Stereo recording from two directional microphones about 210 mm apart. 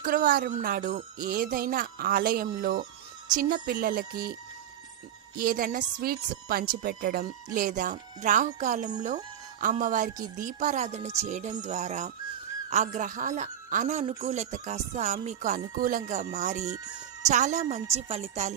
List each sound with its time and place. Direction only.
0.0 s speech: 40° right (ahead or behind)
5.4 s speech: 45° right (ahead or behind)